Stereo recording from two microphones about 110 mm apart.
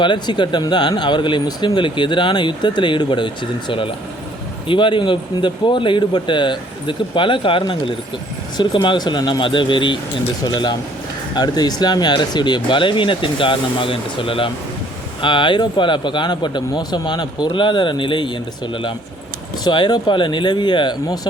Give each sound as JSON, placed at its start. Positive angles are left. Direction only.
{"t": 0.0, "sound": "speech", "side_deg": 45}